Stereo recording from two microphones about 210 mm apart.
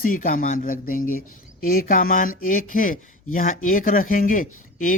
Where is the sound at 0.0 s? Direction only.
40° left (ahead or behind).